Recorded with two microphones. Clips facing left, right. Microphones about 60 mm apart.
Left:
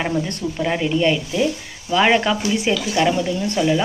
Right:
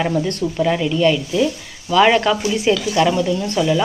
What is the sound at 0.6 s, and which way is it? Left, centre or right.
Speech, centre.